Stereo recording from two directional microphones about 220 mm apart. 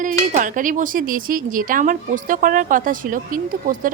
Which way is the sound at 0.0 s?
35° right (ahead or behind).